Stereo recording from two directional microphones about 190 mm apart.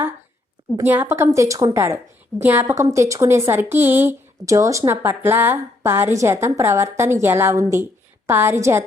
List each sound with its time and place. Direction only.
0.8 s speech: 10° right (ahead or behind)